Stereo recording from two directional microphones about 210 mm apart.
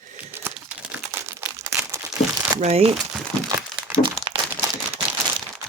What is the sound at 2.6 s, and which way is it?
Speech, 30° right (ahead or behind).